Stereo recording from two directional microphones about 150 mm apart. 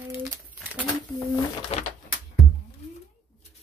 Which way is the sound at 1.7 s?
45° left (ahead or behind).